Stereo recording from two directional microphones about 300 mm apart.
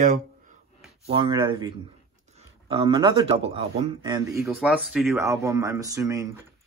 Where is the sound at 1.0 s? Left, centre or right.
Centre.